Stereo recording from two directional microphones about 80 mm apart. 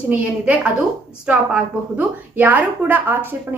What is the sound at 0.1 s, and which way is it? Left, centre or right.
A woman's voice, centre.